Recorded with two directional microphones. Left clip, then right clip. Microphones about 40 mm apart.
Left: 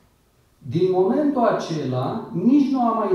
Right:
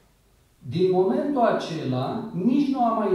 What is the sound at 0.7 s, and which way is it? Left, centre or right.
A man's voice, left.